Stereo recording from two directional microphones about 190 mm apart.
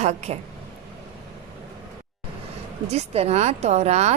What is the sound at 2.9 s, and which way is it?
Speech, 35° right (ahead or behind).